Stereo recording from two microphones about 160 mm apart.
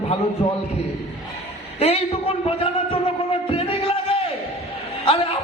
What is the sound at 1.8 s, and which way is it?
Speech, 35° left (ahead or behind).